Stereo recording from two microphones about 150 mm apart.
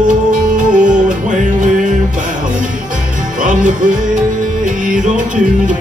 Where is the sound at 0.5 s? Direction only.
60° right (ahead or behind).